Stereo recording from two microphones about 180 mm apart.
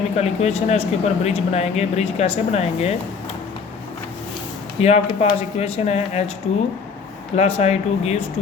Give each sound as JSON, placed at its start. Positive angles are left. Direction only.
{"t": 0.2, "sound": "speech", "side_deg": 35}
{"t": 4.8, "sound": "speech", "side_deg": 35}
{"t": 7.3, "sound": "speech", "side_deg": 35}